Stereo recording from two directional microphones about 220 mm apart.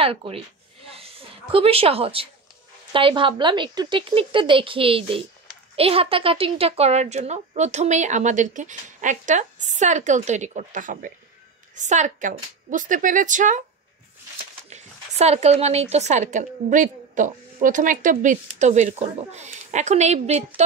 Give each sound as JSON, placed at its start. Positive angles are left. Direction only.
{"t": 0.0, "sound": "a woman's voice", "side_deg": -25}
{"t": 14.7, "sound": "a woman's voice", "side_deg": -30}